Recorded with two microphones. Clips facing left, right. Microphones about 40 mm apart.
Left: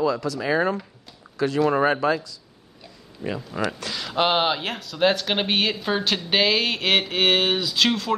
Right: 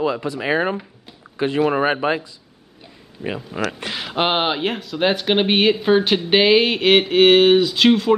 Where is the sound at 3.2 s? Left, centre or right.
Right.